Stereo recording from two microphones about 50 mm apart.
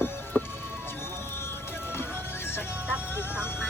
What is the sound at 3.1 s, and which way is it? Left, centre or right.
Vehicle, left.